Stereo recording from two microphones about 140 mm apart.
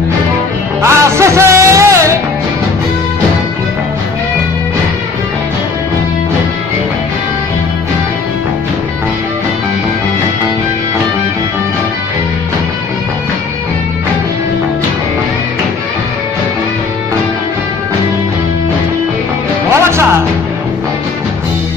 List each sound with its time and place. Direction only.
0.8 s music: 20° right (ahead or behind)
19.8 s music: 20° right (ahead or behind)